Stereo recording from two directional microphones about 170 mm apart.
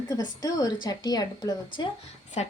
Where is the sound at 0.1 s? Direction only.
20° left (ahead or behind).